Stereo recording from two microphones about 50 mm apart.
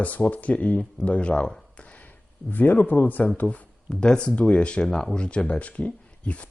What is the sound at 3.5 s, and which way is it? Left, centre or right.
Speech, centre.